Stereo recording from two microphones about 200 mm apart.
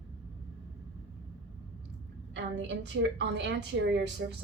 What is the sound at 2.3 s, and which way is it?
A woman's voice, 60° right (ahead or behind).